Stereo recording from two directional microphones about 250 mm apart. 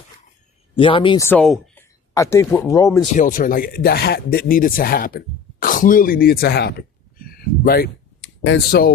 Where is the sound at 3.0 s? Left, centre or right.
Left.